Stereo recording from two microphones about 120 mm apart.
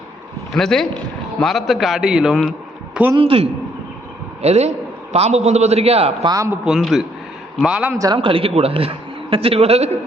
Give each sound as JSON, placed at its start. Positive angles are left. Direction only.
{"t": 0.5, "sound": "a man's voice", "side_deg": 5}
{"t": 3.2, "sound": "a man's voice", "side_deg": -55}
{"t": 4.4, "sound": "a man's voice", "side_deg": -65}
{"t": 6.2, "sound": "speech", "side_deg": -30}
{"t": 6.5, "sound": "a man's voice", "side_deg": -5}
{"t": 7.9, "sound": "speech", "side_deg": -30}
{"t": 8.2, "sound": "a man's voice", "side_deg": -50}